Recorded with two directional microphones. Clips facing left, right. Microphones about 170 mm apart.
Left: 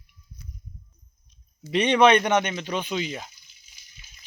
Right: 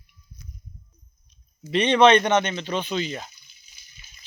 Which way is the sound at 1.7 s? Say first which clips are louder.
Right 1 dB; 15° left (ahead or behind).